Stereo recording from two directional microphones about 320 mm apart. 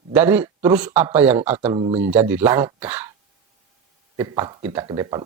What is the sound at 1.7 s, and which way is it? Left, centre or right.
Speech, centre.